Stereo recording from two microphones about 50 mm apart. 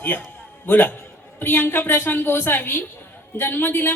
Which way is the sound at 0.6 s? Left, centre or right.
Left.